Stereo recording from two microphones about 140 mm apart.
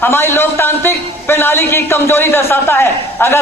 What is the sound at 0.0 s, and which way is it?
A man's voice, 15° left (ahead or behind).